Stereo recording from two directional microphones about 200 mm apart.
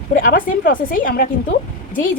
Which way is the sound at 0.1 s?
45° left (ahead or behind).